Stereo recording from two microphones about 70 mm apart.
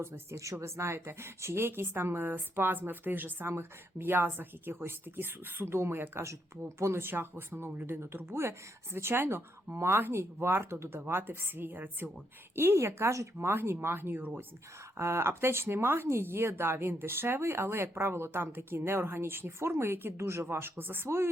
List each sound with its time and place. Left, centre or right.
0.0 s speech: right
14.9 s speech: right